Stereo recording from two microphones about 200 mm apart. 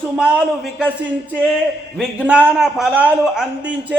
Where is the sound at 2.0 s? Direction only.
5° right (ahead or behind).